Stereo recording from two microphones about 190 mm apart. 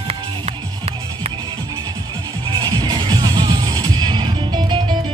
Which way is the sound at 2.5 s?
20° right (ahead or behind).